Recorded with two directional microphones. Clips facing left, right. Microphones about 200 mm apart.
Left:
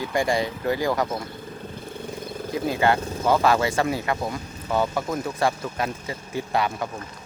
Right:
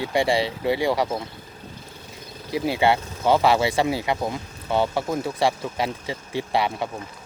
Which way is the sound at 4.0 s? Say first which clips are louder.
Right 1 dB; 20° right (ahead or behind).